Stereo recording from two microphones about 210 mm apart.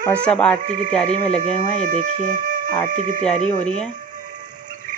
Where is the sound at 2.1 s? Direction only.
40° right (ahead or behind).